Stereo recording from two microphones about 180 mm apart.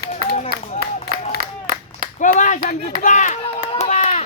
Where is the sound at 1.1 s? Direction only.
55° right (ahead or behind).